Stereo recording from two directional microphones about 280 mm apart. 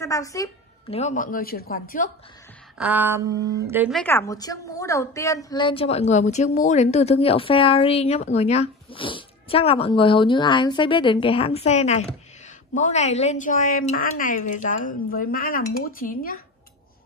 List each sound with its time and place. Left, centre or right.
0.0 s a woman's voice: centre; by 2.0 s left
2.8 s a sound: centre
4.0 s a woman's voice: centre; by 16.3 s left